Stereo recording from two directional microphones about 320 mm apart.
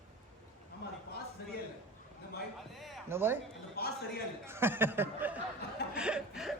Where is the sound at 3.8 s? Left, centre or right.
Left.